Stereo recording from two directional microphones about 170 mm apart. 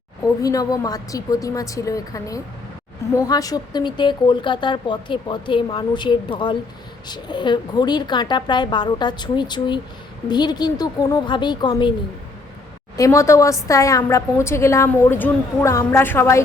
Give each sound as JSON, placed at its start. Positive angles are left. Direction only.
{"t": 0.4, "sound": "a woman's voice", "side_deg": 20}
{"t": 13.0, "sound": "a woman's voice", "side_deg": 15}